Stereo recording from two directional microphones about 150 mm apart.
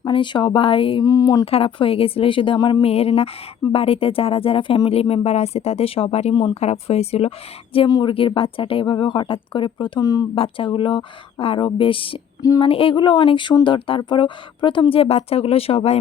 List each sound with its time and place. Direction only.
0.0 s speech: 35° left (ahead or behind)
1.0 s speech: 25° left (ahead or behind)
1.5 s speech: 40° left (ahead or behind)
2.8 s speech: 40° left (ahead or behind)
6.3 s speech: 30° left (ahead or behind)
6.6 s a woman's voice: 45° left (ahead or behind)
7.9 s speech: 25° left (ahead or behind)
8.4 s speech: 35° left (ahead or behind)
10.3 s speech: 35° left (ahead or behind)
12.4 s a sound: 25° left (ahead or behind)
12.6 s speech: 35° left (ahead or behind)